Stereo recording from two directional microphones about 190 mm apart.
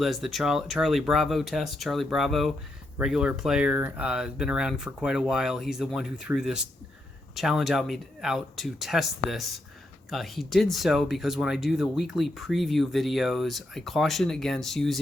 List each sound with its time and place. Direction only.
0.0 s speech: centre (ahead or behind)